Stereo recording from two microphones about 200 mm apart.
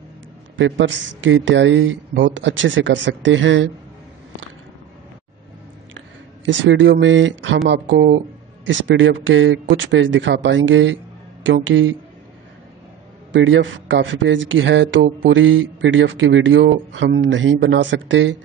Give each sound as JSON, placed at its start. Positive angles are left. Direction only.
{"t": 0.6, "sound": "speech", "side_deg": -65}
{"t": 5.9, "sound": "speech", "side_deg": -65}
{"t": 13.3, "sound": "speech", "side_deg": -65}